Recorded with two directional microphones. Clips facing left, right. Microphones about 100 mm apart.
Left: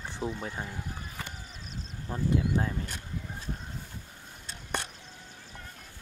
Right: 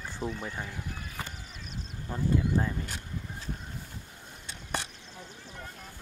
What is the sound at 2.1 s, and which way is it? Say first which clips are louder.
Speech: even; 5° left (ahead or behind).